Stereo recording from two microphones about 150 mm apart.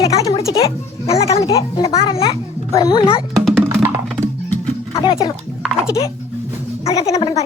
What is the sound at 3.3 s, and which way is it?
Music, 5° left (ahead or behind).